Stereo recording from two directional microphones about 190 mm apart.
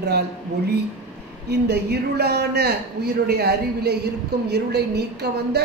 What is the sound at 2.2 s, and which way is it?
Speech, 55° right (ahead or behind).